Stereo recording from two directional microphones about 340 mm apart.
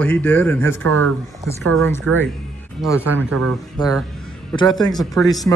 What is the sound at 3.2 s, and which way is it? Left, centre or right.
Speech, right.